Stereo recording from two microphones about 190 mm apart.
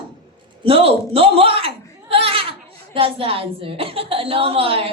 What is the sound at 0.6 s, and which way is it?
A woman's voice, 30° right (ahead or behind).